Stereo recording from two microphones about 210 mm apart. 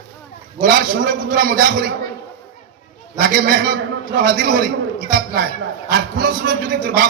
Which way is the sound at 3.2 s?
45° right (ahead or behind).